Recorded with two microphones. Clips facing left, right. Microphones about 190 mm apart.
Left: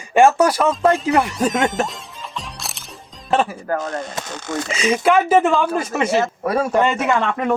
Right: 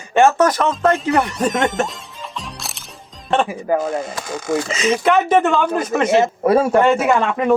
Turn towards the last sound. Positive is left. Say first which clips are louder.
# right 3 dB
turn(degrees=-10)  # may be behind; listen again after turning